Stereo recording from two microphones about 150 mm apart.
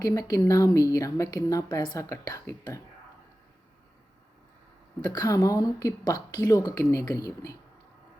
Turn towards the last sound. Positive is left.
turn(degrees=20)  # may be behind; listen again after turning